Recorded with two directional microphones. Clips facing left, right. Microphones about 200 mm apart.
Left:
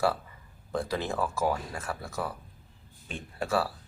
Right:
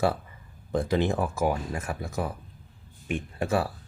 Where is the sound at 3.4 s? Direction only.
20° right (ahead or behind).